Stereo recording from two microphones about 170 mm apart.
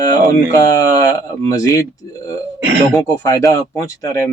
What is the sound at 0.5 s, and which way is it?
Speech, 20° left (ahead or behind).